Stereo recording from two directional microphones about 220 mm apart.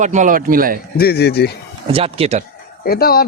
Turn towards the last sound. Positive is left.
turn(degrees=45)  # may be behind; listen again after turning